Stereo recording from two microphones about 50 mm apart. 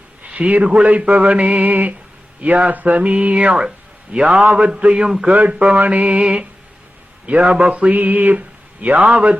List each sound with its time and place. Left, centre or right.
0.3 s speech: right
5.7 s mantra: right
6.2 s speech: centre